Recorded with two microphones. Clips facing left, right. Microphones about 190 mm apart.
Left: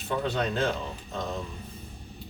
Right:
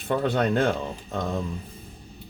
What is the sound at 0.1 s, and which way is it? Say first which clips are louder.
Speech: right 5 dB; 55° right (ahead or behind).